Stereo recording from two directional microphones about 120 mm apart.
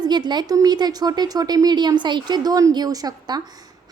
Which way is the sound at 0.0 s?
35° right (ahead or behind).